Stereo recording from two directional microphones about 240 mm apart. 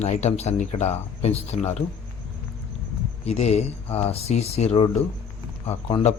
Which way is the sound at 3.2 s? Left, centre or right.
Left.